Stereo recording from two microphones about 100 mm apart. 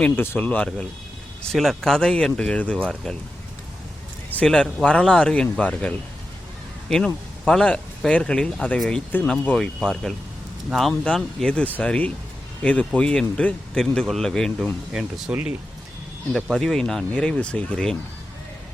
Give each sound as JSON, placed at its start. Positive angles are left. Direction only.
{"t": 0.0, "sound": "speech", "side_deg": 15}
{"t": 1.5, "sound": "speech", "side_deg": 0}
{"t": 4.4, "sound": "speech", "side_deg": 10}
{"t": 6.9, "sound": "speech", "side_deg": 5}
{"t": 14.9, "sound": "speech", "side_deg": -15}
{"t": 16.3, "sound": "speech", "side_deg": 5}